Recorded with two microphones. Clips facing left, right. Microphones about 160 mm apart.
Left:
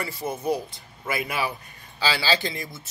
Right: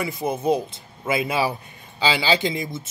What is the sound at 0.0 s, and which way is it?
A man's voice, 20° right (ahead or behind).